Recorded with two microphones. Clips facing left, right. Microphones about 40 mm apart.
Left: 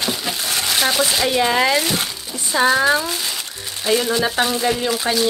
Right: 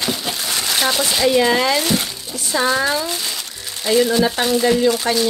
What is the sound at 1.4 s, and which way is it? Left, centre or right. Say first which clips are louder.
Speech: right 1 dB; left.